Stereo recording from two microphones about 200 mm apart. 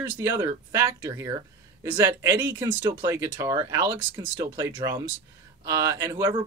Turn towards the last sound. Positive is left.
turn(degrees=-15)  # may be behind; listen again after turning